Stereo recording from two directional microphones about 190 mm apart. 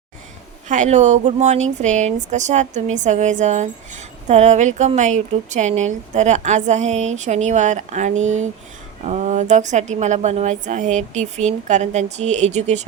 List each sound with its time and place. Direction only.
0.7 s a woman's voice: 40° right (ahead or behind)